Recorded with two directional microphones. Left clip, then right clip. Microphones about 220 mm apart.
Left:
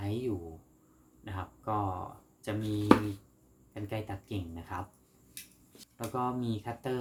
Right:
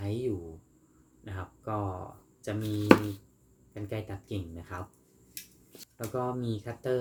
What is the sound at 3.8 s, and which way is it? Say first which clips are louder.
Speech: right 1 dB; 10° left (ahead or behind).